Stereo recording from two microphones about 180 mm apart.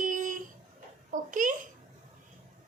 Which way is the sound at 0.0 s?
45° right (ahead or behind).